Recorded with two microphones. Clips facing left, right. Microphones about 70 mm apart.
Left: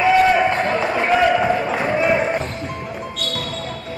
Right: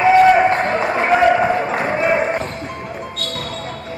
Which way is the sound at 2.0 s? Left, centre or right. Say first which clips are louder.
Right 1 dB; centre.